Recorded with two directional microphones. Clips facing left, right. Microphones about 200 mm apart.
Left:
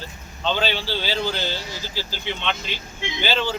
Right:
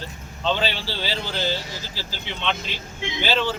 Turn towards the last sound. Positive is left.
turn(degrees=0)  # may be behind; listen again after turning